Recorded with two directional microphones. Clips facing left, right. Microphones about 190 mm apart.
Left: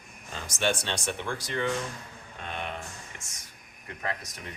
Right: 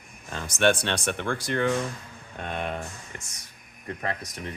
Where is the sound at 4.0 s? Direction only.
35° right (ahead or behind).